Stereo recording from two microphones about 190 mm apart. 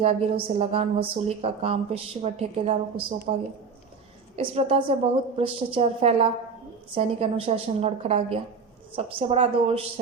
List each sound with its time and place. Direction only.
0.0 s a woman's voice: 30° right (ahead or behind)
4.4 s a woman's voice: 30° right (ahead or behind)